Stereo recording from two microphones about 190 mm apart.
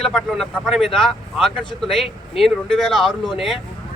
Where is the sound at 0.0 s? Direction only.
Centre (ahead or behind).